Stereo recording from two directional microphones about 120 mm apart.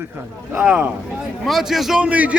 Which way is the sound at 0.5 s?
10° right (ahead or behind).